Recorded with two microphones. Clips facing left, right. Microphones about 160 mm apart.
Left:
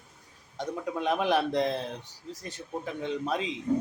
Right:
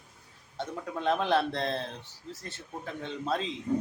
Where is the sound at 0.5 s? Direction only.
15° left (ahead or behind).